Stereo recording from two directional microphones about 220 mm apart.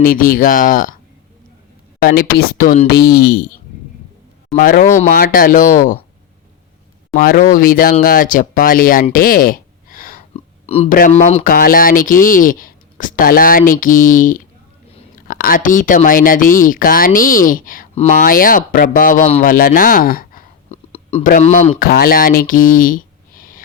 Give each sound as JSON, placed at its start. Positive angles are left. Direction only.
{"t": 0.0, "sound": "speech", "side_deg": 40}
{"t": 2.0, "sound": "speech", "side_deg": 40}
{"t": 4.5, "sound": "speech", "side_deg": 40}
{"t": 7.1, "sound": "speech", "side_deg": 40}
{"t": 9.1, "sound": "a sound", "side_deg": 40}
{"t": 10.3, "sound": "a sound", "side_deg": 30}
{"t": 10.9, "sound": "speech", "side_deg": 35}